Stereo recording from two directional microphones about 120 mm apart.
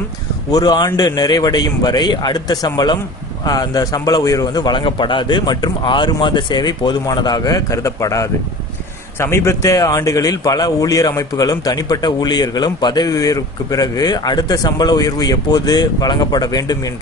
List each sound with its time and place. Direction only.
0.5 s a man's voice: 30° left (ahead or behind)